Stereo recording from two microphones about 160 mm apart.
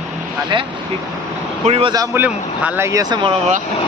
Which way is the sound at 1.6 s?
40° right (ahead or behind).